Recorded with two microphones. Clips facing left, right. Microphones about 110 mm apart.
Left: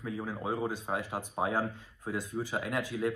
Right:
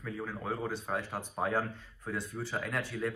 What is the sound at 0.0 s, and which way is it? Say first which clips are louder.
Speech: left 2 dB; 15° left (ahead or behind).